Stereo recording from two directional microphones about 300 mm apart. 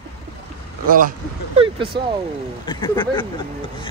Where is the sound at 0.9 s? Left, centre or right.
Right.